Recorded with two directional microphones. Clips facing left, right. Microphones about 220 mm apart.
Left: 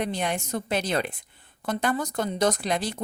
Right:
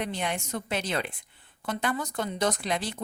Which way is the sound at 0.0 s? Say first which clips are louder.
Left 3 dB; 40° left (ahead or behind).